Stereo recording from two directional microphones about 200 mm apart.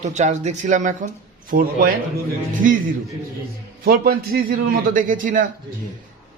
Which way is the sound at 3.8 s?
50° right (ahead or behind).